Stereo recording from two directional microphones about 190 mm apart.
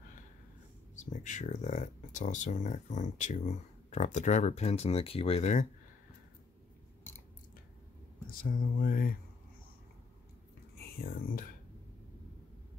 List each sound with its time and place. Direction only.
0.9 s speech: 40° left (ahead or behind)
8.3 s a sound: 45° left (ahead or behind)
10.8 s speech: 50° left (ahead or behind)